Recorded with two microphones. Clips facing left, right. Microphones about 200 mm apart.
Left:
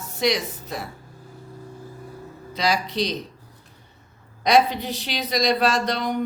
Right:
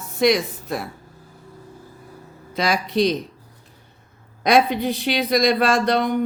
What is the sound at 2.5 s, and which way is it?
Speech, 55° right (ahead or behind).